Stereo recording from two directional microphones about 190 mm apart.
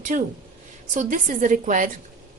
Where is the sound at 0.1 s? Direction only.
45° right (ahead or behind).